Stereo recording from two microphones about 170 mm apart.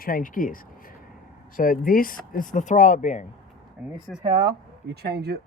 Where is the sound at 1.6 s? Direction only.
55° left (ahead or behind).